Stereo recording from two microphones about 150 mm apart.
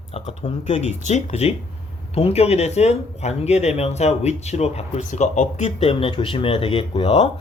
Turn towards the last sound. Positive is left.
turn(degrees=35)  # may be behind; listen again after turning